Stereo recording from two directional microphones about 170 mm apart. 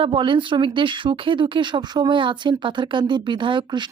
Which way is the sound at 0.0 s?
30° right (ahead or behind).